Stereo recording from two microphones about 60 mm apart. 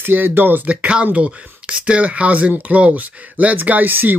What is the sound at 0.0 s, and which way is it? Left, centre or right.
Speech, right.